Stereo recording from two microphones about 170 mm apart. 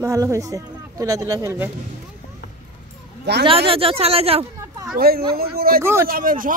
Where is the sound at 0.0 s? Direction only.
20° right (ahead or behind).